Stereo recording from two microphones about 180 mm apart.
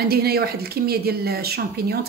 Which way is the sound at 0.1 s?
60° right (ahead or behind).